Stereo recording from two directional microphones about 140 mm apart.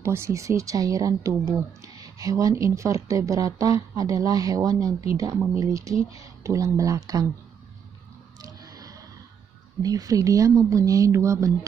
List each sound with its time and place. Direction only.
0.0 s speech: 20° right (ahead or behind)
8.4 s a sound: 25° right (ahead or behind)
9.8 s speech: 25° right (ahead or behind)